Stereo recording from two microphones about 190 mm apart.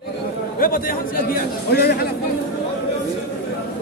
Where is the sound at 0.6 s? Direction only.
50° left (ahead or behind).